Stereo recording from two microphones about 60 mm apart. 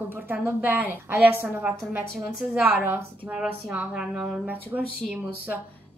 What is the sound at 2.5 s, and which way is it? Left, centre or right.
Speech, right.